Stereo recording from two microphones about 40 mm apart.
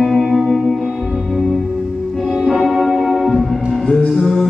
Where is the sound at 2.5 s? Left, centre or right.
Centre.